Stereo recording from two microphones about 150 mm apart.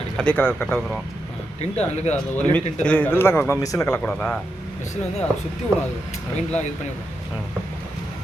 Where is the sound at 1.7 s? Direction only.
45° left (ahead or behind).